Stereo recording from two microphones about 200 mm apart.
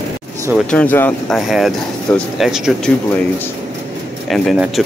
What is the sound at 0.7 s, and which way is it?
Speech, 10° left (ahead or behind).